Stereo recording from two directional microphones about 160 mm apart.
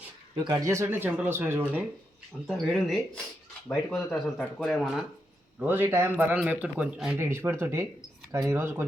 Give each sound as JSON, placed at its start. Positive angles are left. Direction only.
{"t": 0.3, "sound": "a man's voice", "side_deg": -25}
{"t": 2.5, "sound": "speech", "side_deg": 0}
{"t": 5.5, "sound": "a man's voice", "side_deg": -10}